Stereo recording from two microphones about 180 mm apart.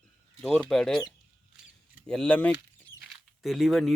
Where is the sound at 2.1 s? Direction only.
5° left (ahead or behind).